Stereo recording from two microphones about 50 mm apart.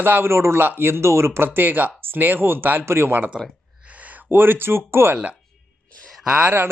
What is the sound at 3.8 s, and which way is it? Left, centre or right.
Speech, right.